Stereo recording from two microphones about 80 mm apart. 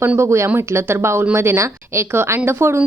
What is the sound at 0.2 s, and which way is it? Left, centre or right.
Speech, right.